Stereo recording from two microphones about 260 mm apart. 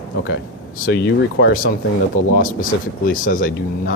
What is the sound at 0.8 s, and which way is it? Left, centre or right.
Speech, left.